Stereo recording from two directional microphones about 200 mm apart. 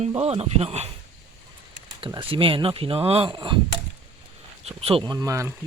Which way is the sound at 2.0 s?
25° right (ahead or behind).